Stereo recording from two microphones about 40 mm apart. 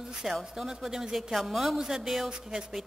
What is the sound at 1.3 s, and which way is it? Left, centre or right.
Speech, centre.